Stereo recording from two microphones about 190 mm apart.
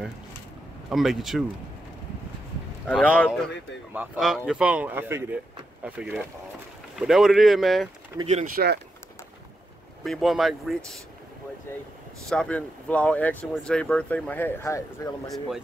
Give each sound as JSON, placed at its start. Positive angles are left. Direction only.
{"t": 0.8, "sound": "speech", "side_deg": 0}
{"t": 2.9, "sound": "speech", "side_deg": 5}
{"t": 3.9, "sound": "speech", "side_deg": -5}
{"t": 8.6, "sound": "speech", "side_deg": -45}
{"t": 10.0, "sound": "speech", "side_deg": 0}
{"t": 12.3, "sound": "speech", "side_deg": 5}
{"t": 15.2, "sound": "speech", "side_deg": 0}